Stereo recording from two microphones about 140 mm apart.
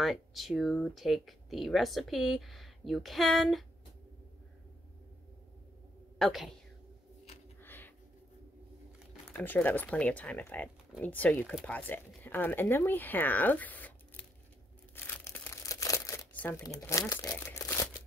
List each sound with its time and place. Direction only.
0.0 s speech: centre (ahead or behind)
6.1 s a woman's voice: centre (ahead or behind)
7.6 s a sound: 15° left (ahead or behind)
9.3 s speech: 15° left (ahead or behind)
15.0 s crumpling: 15° left (ahead or behind)
15.6 s crumpling: 25° left (ahead or behind)
16.8 s speech: 25° left (ahead or behind)
17.5 s a sound: 20° left (ahead or behind)